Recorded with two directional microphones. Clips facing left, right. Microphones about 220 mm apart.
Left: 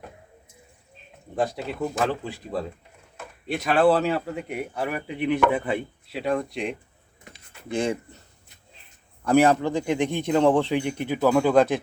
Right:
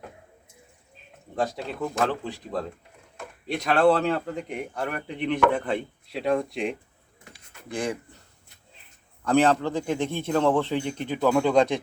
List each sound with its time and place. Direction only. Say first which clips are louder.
1.4 s a man's voice: left 2 dB; 10° left (ahead or behind)
7.3 s a sound: left 4 dB; 25° left (ahead or behind)
9.2 s a man's voice: left 2 dB; 10° left (ahead or behind)